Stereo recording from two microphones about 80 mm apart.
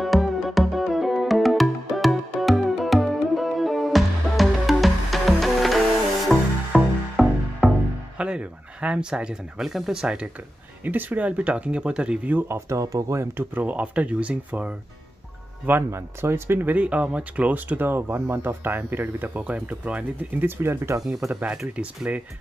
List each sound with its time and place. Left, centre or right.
0.0 s music: centre
8.2 s speech: centre
10.8 s speech: right
12.4 s speech: right
13.4 s speech: right
15.9 s speech: right
16.7 s speech: centre; by 21.0 s right
21.3 s speech: centre